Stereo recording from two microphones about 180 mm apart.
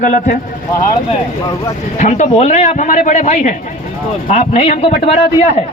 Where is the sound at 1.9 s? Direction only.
40° left (ahead or behind).